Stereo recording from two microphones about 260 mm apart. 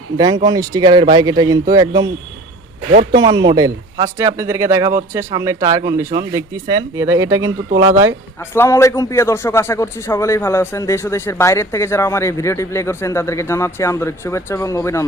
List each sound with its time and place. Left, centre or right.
0.4 s speech: centre
2.9 s speech: right
3.2 s speech: centre
8.5 s a man's voice: centre